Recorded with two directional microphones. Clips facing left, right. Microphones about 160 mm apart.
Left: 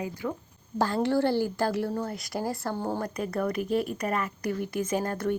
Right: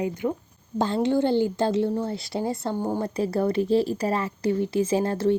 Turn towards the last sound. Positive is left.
turn(degrees=-25)  # may be behind; listen again after turning